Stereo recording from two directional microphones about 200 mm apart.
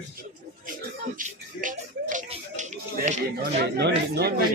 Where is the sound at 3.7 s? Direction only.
55° right (ahead or behind).